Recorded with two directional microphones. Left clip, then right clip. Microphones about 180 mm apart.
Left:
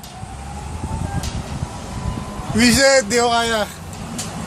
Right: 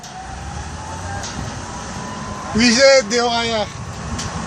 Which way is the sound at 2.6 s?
60° left (ahead or behind).